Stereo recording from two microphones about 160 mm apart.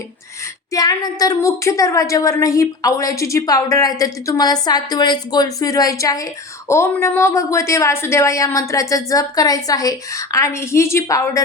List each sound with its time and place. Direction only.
0.7 s a woman's voice: 25° left (ahead or behind)